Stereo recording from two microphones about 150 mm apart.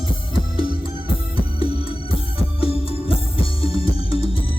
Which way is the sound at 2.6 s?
40° left (ahead or behind).